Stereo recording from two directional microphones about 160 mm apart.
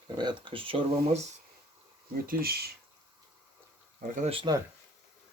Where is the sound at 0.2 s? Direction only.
30° right (ahead or behind).